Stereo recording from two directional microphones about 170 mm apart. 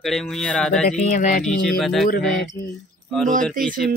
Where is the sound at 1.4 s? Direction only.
5° left (ahead or behind).